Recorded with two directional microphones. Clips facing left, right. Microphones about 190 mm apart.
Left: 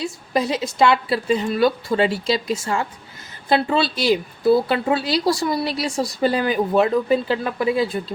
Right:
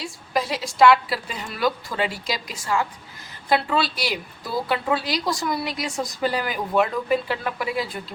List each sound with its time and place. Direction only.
0.0 s speech: 20° left (ahead or behind)